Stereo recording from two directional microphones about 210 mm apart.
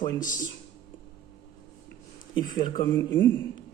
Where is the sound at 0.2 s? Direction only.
40° left (ahead or behind).